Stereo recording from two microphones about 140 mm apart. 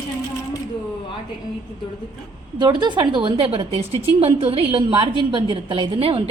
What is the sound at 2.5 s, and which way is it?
A woman's voice, 30° right (ahead or behind).